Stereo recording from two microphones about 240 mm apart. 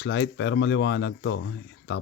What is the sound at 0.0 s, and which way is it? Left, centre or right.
Speech, left.